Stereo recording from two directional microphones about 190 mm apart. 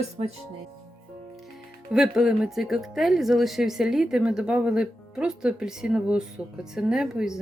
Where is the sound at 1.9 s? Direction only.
5° right (ahead or behind).